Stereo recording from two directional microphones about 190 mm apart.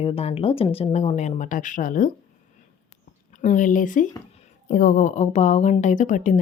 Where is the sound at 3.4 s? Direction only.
45° left (ahead or behind).